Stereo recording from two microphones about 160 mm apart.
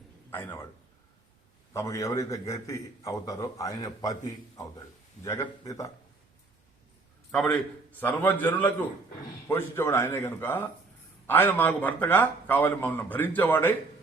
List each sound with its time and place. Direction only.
0.3 s a man's voice: 15° left (ahead or behind)
1.7 s a man's voice: 20° left (ahead or behind)
5.2 s a man's voice: 20° left (ahead or behind)
7.3 s a man's voice: 5° left (ahead or behind)